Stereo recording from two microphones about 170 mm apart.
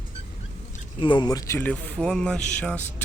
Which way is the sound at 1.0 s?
25° left (ahead or behind).